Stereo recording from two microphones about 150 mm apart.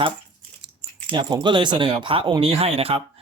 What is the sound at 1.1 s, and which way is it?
Speech, 30° right (ahead or behind).